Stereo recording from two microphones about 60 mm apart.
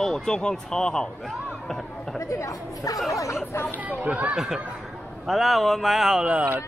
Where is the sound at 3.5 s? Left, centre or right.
Left.